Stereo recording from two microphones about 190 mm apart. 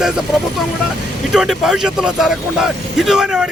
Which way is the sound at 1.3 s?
Centre (ahead or behind).